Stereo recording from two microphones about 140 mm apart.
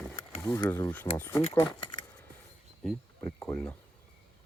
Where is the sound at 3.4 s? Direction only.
10° left (ahead or behind).